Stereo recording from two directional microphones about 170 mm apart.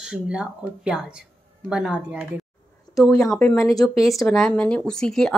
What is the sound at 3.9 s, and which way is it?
Speech, 20° left (ahead or behind).